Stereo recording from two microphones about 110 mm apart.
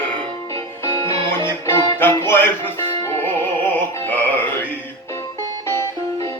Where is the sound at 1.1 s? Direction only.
50° right (ahead or behind).